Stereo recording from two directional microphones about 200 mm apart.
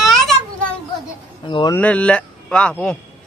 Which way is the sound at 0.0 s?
Centre (ahead or behind).